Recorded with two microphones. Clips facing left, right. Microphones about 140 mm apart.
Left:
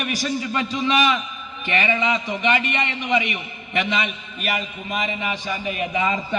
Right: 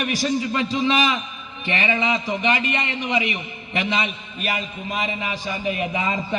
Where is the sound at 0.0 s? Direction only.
30° right (ahead or behind).